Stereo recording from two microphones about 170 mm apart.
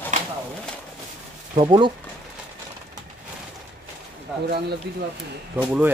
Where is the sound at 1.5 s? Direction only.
30° right (ahead or behind).